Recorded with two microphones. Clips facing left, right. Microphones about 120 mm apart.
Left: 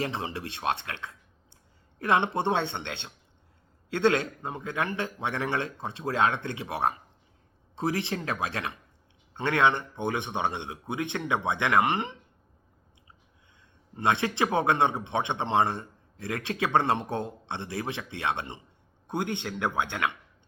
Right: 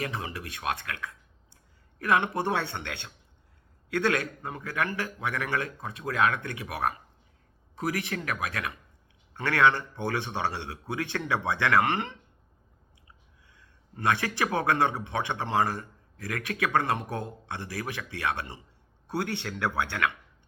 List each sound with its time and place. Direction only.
0.0 s a man's voice: 25° left (ahead or behind)
13.6 s a man's voice: 25° left (ahead or behind)